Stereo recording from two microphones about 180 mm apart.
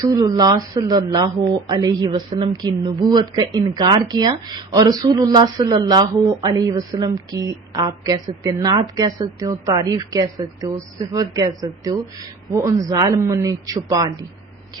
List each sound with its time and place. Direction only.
0.0 s speech: 20° right (ahead or behind)